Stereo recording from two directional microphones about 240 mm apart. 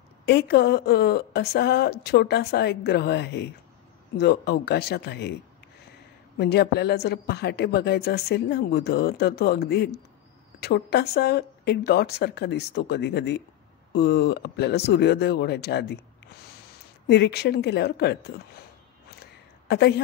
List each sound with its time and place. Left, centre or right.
0.2 s a woman's voice: left
6.3 s a woman's voice: left
17.1 s a woman's voice: left
19.7 s a woman's voice: left